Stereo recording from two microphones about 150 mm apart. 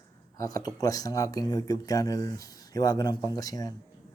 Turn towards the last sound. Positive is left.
turn(degrees=25)  # may be behind; listen again after turning